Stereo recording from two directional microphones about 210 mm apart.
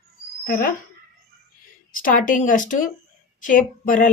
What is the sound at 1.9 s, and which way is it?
A woman's voice, 40° left (ahead or behind).